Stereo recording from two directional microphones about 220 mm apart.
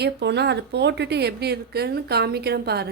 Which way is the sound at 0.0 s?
50° right (ahead or behind).